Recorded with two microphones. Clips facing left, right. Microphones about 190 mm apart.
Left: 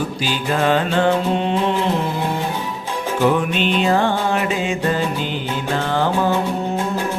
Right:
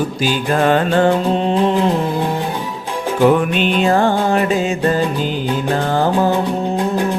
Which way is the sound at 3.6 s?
50° right (ahead or behind).